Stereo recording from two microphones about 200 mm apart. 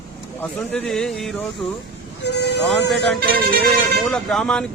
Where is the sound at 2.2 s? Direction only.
60° left (ahead or behind).